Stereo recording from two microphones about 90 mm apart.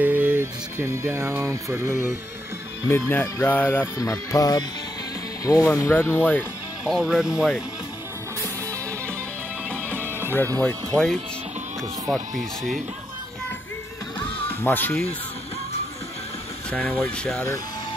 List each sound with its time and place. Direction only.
0.0 s music: 20° right (ahead or behind)
3.1 s music: 25° left (ahead or behind)
4.0 s speech: 40° left (ahead or behind)
5.8 s music: 30° left (ahead or behind)
6.9 s speech: 5° right (ahead or behind)
9.9 s music: 25° right (ahead or behind)
10.6 s speech: 10° left (ahead or behind)
14.5 s speech: 25° left (ahead or behind)
16.7 s music: 25° left (ahead or behind)